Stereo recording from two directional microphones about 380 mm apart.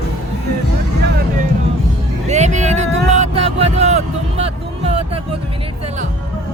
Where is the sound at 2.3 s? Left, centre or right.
Centre.